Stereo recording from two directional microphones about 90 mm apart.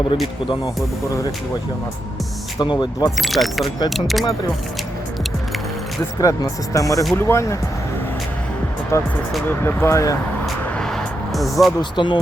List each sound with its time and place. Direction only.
2.6 s speech: 55° left (ahead or behind)
3.2 s speech: centre (ahead or behind)
6.1 s speech: 40° left (ahead or behind)
8.9 s speech: 35° left (ahead or behind)
10.4 s vehicle: 5° left (ahead or behind)
11.8 s speech: 60° left (ahead or behind)